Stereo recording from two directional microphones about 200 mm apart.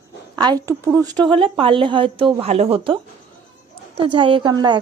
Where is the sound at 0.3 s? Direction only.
20° right (ahead or behind).